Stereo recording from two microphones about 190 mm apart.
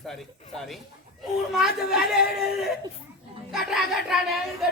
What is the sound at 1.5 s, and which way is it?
Speech, centre (ahead or behind).